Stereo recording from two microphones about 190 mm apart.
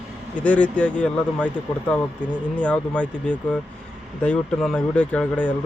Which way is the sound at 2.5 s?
5° left (ahead or behind).